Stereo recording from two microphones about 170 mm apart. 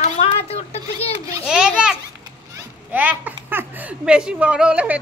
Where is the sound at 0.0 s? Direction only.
35° left (ahead or behind).